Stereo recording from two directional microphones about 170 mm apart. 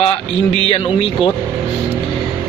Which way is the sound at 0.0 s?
35° left (ahead or behind).